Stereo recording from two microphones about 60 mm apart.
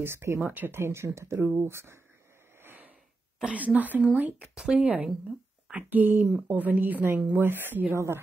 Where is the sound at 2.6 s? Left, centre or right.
Right.